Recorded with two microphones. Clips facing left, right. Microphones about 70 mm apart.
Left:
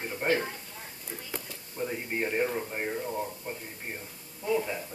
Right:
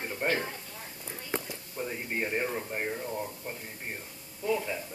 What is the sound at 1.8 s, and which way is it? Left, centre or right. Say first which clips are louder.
Speech: left 2 dB; centre.